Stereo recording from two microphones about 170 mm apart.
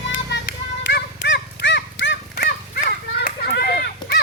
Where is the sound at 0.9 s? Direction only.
90° left.